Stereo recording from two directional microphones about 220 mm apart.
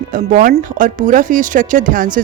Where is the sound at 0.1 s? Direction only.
40° right (ahead or behind).